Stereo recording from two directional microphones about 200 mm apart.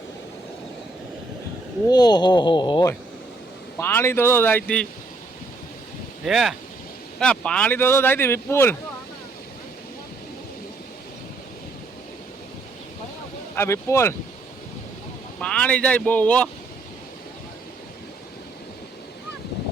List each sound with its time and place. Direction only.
1.9 s speech: 20° left (ahead or behind)
3.8 s speech: 10° left (ahead or behind)
6.2 s speech: centre (ahead or behind)
13.6 s speech: 15° left (ahead or behind)
15.4 s speech: 5° left (ahead or behind)